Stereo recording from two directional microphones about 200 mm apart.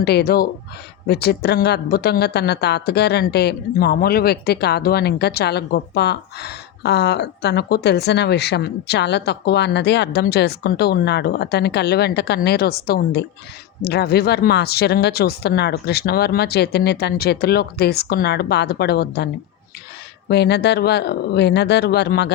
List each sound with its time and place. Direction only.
0.0 s speech: 55° left (ahead or behind)